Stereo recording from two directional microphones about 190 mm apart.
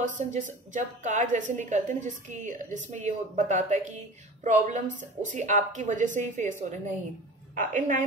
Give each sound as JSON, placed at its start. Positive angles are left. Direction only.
{"t": 0.0, "sound": "a woman's voice", "side_deg": -40}
{"t": 7.5, "sound": "a woman's voice", "side_deg": -45}